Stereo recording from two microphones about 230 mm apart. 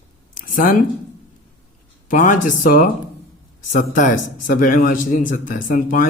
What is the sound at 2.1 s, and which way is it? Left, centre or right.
A man's voice, left.